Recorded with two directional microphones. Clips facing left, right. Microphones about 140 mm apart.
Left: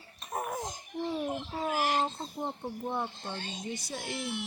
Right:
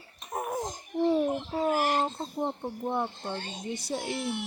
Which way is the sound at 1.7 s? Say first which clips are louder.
Right 1 dB; 50° right (ahead or behind).